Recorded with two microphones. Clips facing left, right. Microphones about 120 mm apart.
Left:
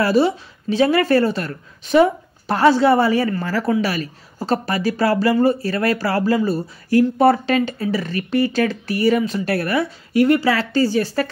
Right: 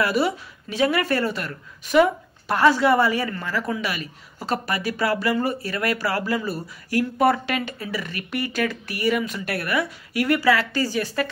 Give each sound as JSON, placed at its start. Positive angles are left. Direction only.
{"t": 0.0, "sound": "a woman's voice", "side_deg": 30}